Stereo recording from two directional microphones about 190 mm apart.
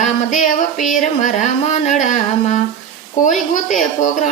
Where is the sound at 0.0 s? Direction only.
40° left (ahead or behind).